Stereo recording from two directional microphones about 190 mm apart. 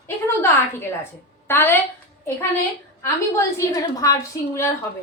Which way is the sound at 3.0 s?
15° left (ahead or behind).